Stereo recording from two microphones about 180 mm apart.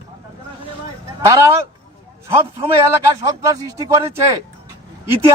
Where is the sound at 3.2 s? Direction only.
20° right (ahead or behind).